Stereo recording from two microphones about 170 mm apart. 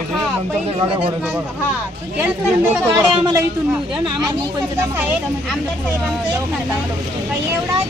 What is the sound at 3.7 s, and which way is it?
Speech, centre (ahead or behind).